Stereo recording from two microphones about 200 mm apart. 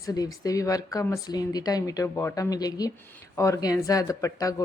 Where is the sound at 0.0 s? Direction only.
20° left (ahead or behind).